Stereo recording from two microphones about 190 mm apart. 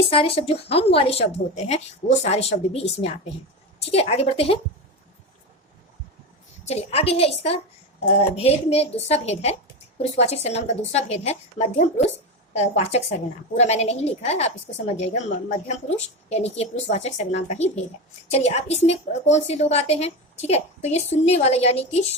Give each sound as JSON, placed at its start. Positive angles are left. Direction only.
{"t": 0.1, "sound": "a woman's voice", "side_deg": 30}
{"t": 6.7, "sound": "a woman's voice", "side_deg": 30}